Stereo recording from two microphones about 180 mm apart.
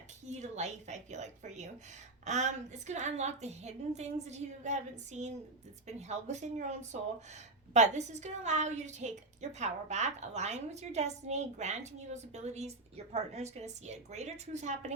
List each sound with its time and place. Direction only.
0.3 s a woman's voice: 40° right (ahead or behind)